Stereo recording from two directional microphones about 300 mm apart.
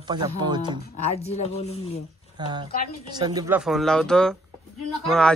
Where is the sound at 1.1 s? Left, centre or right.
Left.